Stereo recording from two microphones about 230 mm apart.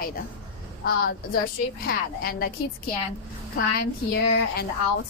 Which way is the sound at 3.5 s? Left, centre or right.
Left.